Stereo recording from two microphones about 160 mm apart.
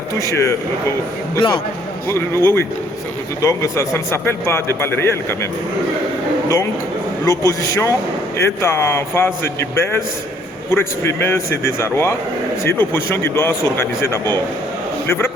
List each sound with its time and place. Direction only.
0.2 s a man's voice: 20° left (ahead or behind)
1.4 s a man's voice: 30° left (ahead or behind)
2.0 s a man's voice: 15° left (ahead or behind)
7.3 s a man's voice: 20° left (ahead or behind)